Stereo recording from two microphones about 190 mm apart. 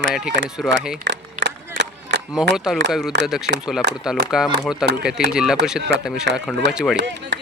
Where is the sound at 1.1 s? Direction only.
70° right (ahead or behind).